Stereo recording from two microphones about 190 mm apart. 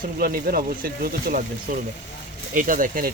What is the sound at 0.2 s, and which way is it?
Speech, 50° right (ahead or behind).